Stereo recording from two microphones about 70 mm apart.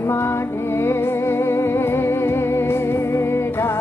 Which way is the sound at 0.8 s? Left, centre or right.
Left.